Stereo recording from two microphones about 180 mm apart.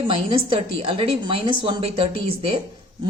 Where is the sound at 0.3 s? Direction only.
30° right (ahead or behind).